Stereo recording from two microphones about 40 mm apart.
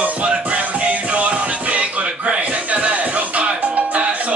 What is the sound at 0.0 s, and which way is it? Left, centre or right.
Music, right.